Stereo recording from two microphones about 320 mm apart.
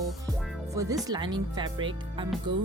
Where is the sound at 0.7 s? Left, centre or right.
Centre.